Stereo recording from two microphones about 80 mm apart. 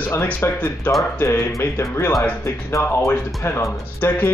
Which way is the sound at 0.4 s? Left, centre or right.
Left.